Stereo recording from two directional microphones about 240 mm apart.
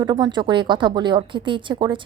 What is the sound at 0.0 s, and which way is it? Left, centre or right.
A woman's voice, centre.